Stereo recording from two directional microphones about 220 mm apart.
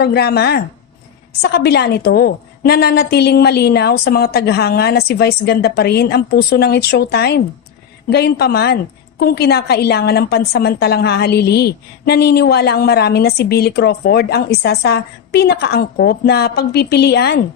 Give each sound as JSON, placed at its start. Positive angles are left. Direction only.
{"t": 0.0, "sound": "a woman's voice", "side_deg": 45}